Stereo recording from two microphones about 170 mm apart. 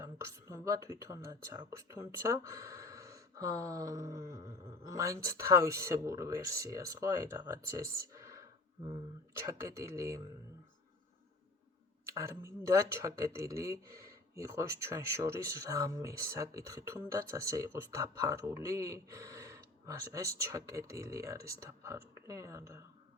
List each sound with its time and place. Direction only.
0.0 s speech: 20° right (ahead or behind)
7.9 s a sound: 15° right (ahead or behind)
9.5 s speech: 15° right (ahead or behind)
12.0 s speech: 15° right (ahead or behind)